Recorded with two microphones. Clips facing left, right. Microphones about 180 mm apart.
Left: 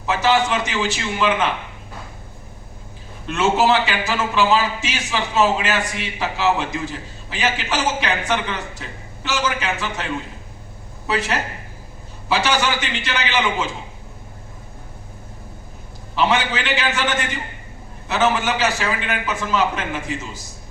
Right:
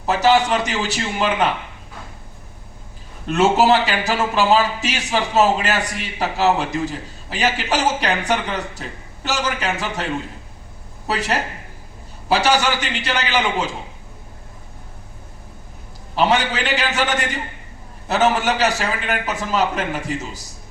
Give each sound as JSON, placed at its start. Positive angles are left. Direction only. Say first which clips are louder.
{"t": 0.0, "sound": "a man's voice", "louder": "right 2 dB", "side_deg": -40}
{"t": 3.2, "sound": "a man's voice", "louder": "right 2 dB", "side_deg": -40}
{"t": 16.1, "sound": "a man's voice", "louder": "right 1 dB", "side_deg": -40}